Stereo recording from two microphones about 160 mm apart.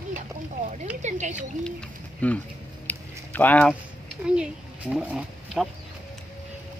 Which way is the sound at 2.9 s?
10° left (ahead or behind).